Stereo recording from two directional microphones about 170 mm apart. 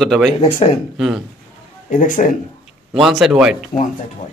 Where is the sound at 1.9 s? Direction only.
50° left (ahead or behind).